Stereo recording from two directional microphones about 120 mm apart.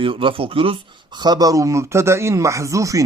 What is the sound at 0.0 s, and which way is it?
A man's voice, 45° right (ahead or behind).